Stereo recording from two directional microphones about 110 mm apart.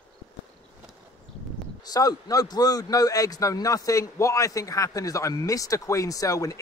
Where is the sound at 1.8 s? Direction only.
35° left (ahead or behind).